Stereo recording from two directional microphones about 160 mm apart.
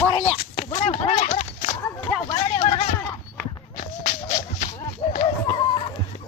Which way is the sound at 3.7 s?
55° left (ahead or behind).